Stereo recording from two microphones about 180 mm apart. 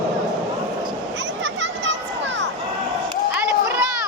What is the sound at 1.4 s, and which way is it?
Children playing, 85° right.